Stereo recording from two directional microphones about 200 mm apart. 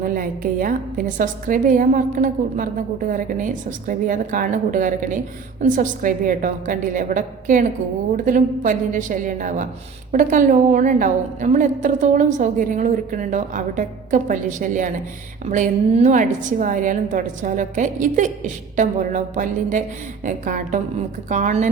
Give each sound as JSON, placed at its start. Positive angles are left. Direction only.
{"t": 0.0, "sound": "a woman's voice", "side_deg": -45}